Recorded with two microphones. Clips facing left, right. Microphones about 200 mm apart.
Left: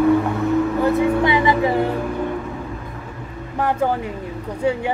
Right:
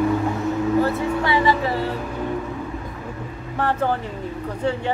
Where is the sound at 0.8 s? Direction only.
15° left (ahead or behind).